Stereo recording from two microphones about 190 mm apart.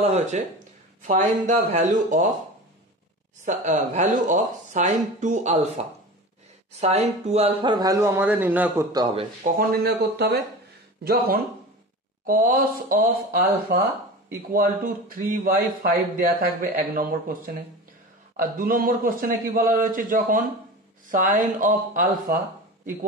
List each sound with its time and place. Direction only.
0.0 s speech: 35° right (ahead or behind)
3.4 s speech: 40° right (ahead or behind); by 8.8 s 10° right (ahead or behind)
8.9 s speech: 25° right (ahead or behind)
9.6 s speech: 55° right (ahead or behind)
12.3 s a man's voice: 50° right (ahead or behind)